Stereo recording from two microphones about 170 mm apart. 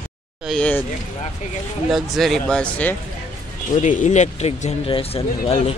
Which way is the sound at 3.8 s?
45° left (ahead or behind).